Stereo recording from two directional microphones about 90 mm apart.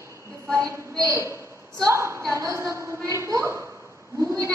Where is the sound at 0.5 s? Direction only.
35° right (ahead or behind).